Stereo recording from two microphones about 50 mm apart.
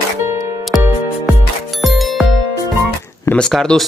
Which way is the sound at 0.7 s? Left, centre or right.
Centre.